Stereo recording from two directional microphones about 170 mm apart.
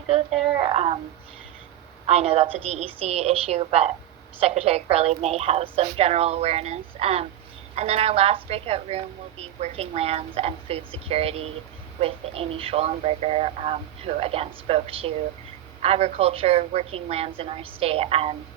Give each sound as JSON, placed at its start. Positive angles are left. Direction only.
{"t": 0.1, "sound": "a woman's voice", "side_deg": -35}
{"t": 2.0, "sound": "a woman's voice", "side_deg": -35}